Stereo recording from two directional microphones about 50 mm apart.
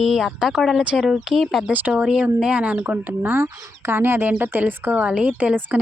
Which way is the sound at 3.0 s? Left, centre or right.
Right.